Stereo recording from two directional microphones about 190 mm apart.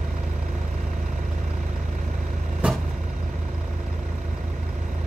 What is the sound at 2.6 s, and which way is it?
Vehicle, 5° right (ahead or behind).